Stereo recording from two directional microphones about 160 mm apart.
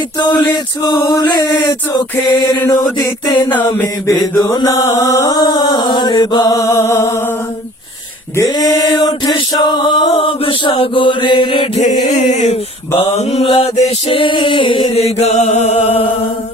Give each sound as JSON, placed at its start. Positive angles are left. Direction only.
{"t": 0.2, "sound": "mantra", "side_deg": 25}
{"t": 8.4, "sound": "mantra", "side_deg": 25}
{"t": 11.8, "sound": "a sound", "side_deg": 50}
{"t": 13.0, "sound": "music", "side_deg": 40}